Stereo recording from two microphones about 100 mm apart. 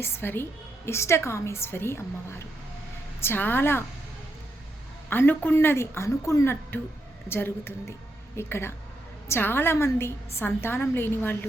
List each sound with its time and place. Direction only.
0.0 s a woman's voice: 20° left (ahead or behind)
5.0 s a woman's voice: 20° left (ahead or behind)